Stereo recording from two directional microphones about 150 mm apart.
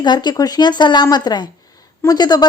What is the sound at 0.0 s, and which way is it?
A woman's voice, 30° left (ahead or behind).